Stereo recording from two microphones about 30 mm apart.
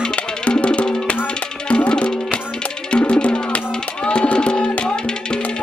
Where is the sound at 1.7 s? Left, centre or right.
Left.